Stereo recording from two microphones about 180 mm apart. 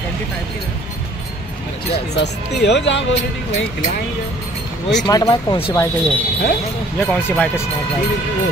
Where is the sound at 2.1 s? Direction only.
75° left (ahead or behind).